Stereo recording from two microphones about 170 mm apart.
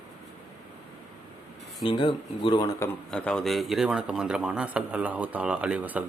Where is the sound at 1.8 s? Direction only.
30° left (ahead or behind).